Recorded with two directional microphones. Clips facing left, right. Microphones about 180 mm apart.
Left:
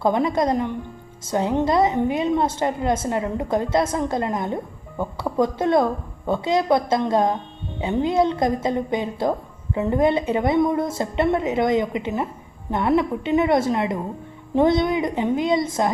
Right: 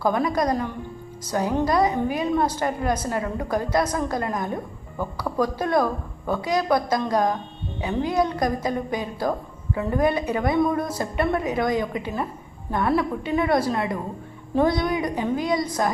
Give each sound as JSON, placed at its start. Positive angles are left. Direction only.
{"t": 0.0, "sound": "a woman's voice", "side_deg": 25}